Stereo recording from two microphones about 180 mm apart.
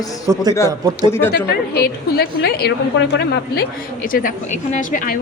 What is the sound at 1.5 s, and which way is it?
A woman's voice, 65° left (ahead or behind).